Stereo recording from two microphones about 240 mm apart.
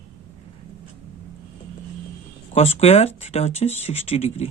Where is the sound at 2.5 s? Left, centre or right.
Left.